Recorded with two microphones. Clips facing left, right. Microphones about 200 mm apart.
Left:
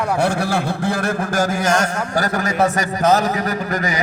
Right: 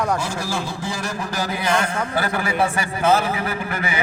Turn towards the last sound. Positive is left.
turn(degrees=40)  # may be behind; listen again after turning